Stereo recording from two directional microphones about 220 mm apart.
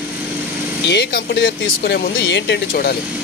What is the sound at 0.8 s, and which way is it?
Speech, 50° left (ahead or behind).